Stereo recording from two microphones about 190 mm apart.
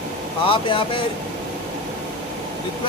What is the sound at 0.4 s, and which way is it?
Speech, 30° left (ahead or behind).